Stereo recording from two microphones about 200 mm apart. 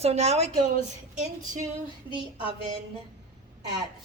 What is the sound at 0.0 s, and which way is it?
Speech, 30° right (ahead or behind).